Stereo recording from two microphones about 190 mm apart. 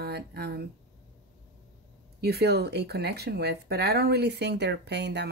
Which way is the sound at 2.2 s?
55° right (ahead or behind).